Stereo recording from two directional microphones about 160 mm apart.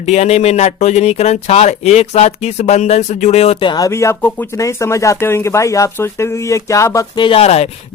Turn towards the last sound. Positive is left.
turn(degrees=40)  # may be behind; listen again after turning